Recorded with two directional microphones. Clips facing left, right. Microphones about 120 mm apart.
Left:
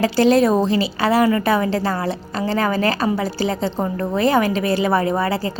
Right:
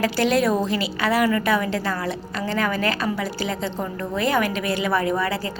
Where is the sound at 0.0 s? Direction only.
30° left (ahead or behind).